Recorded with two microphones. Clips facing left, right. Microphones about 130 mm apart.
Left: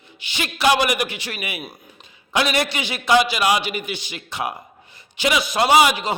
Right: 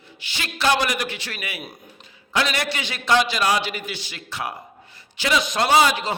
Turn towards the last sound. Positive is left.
turn(degrees=15)  # may be behind; listen again after turning